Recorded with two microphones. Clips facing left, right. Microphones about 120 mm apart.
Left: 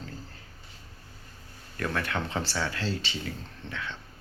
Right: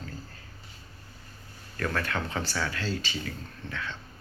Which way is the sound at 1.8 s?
15° left (ahead or behind).